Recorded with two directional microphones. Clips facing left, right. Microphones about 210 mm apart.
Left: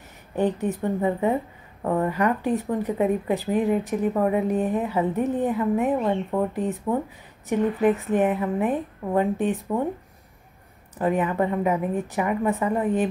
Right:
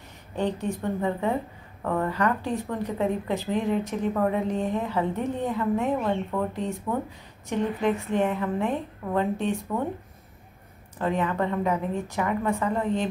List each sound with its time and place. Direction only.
0.4 s a woman's voice: 15° left (ahead or behind)
11.0 s a woman's voice: 15° left (ahead or behind)